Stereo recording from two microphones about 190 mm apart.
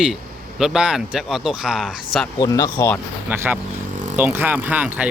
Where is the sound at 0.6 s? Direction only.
5° right (ahead or behind).